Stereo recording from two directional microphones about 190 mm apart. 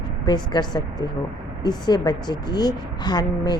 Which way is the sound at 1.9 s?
20° left (ahead or behind).